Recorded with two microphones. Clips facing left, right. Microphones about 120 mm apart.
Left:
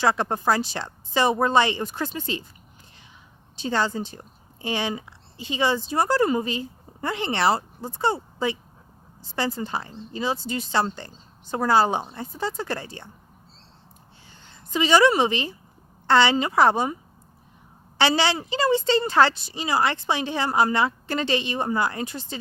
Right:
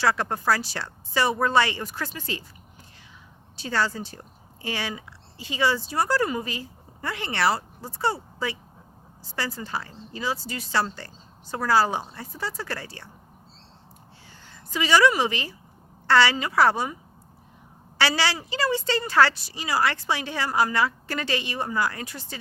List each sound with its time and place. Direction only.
0.0 s a woman's voice: 20° left (ahead or behind)
3.5 s a woman's voice: 20° left (ahead or behind)
14.4 s a woman's voice: 25° left (ahead or behind)